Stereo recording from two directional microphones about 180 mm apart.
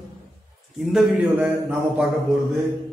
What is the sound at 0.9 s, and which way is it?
A man's voice, 5° right (ahead or behind).